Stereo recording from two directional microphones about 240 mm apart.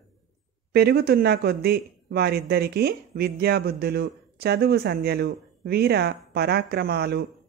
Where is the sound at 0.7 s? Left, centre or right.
Right.